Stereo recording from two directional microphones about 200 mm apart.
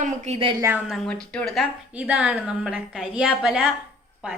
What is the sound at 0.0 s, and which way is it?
Speech, 30° right (ahead or behind).